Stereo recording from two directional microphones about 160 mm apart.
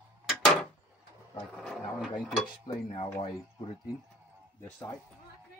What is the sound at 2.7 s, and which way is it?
Speech, 30° left (ahead or behind).